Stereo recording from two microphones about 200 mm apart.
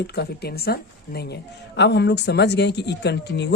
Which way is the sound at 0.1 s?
55° left (ahead or behind).